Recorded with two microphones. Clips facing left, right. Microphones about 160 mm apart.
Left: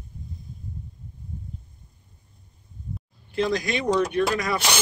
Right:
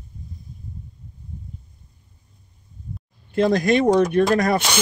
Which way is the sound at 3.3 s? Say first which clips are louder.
Right 7 dB; 50° right (ahead or behind).